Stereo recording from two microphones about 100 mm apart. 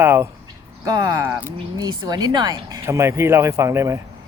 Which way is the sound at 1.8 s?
45° right (ahead or behind).